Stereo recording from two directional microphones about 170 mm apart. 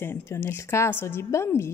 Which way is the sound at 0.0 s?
15° left (ahead or behind).